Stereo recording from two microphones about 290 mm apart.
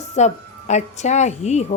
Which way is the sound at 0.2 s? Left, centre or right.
Left.